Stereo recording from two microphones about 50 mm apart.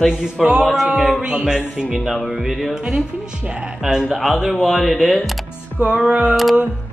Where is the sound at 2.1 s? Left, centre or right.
Centre.